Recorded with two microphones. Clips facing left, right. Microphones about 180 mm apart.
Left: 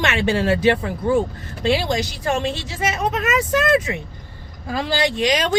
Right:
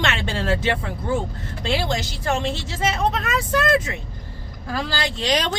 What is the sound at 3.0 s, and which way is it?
Speech, 10° left (ahead or behind).